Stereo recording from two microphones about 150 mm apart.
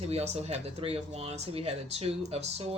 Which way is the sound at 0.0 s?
45° right (ahead or behind).